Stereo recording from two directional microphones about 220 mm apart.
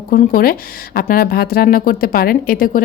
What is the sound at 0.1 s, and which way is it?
Speech, 40° left (ahead or behind).